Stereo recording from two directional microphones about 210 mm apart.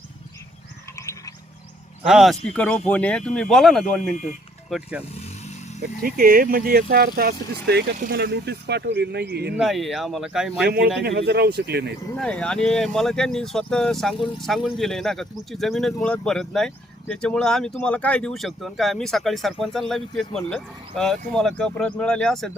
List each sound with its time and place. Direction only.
0.9 s a sound: 15° left (ahead or behind)
2.0 s speech: centre (ahead or behind)
5.8 s speech: 45° right (ahead or behind)
9.6 s speech: centre (ahead or behind)
10.7 s speech: 55° right (ahead or behind)
12.1 s speech: 5° left (ahead or behind)